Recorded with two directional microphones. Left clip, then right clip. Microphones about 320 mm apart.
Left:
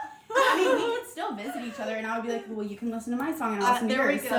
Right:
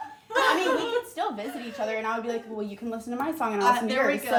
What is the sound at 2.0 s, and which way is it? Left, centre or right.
Speech, centre.